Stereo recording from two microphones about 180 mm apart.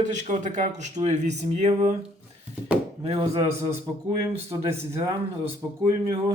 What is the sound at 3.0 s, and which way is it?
Speech, 35° right (ahead or behind).